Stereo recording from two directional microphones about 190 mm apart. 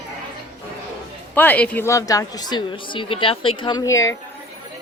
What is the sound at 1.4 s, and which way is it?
A woman's voice, 10° left (ahead or behind).